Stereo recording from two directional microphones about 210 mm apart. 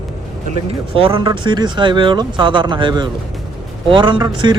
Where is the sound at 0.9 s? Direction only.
25° right (ahead or behind).